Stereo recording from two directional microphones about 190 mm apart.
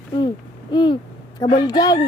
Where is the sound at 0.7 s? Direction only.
25° left (ahead or behind).